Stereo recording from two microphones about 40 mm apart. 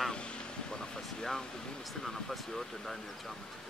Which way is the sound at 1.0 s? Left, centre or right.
Centre.